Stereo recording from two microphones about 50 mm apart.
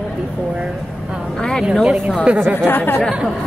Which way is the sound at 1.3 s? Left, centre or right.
Centre.